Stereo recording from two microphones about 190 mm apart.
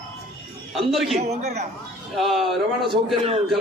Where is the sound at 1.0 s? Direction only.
35° right (ahead or behind).